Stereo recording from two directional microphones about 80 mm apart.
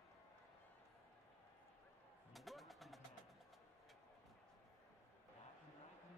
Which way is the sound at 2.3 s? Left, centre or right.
Centre.